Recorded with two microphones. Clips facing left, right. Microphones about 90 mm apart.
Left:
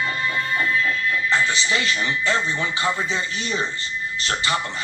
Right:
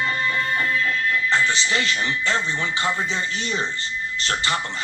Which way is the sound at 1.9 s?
15° left (ahead or behind).